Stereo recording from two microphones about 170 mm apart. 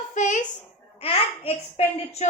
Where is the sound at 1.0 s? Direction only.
35° left (ahead or behind).